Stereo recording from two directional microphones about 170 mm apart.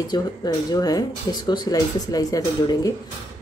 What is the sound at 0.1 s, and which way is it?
Speech, 25° left (ahead or behind).